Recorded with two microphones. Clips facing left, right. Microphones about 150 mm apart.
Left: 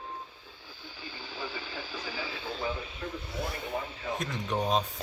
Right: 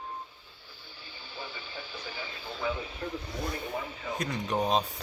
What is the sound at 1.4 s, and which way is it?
Radio, 90° left.